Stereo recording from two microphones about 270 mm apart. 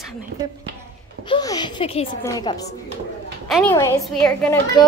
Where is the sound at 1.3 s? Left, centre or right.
Centre.